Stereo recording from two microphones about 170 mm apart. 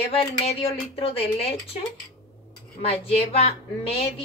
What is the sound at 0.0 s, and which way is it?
A woman's voice, 40° left (ahead or behind).